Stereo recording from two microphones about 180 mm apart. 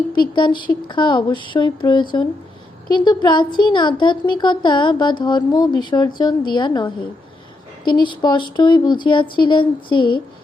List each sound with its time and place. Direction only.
0.1 s speech: 25° left (ahead or behind)